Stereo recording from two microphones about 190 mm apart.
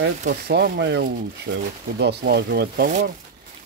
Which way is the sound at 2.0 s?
60° right (ahead or behind).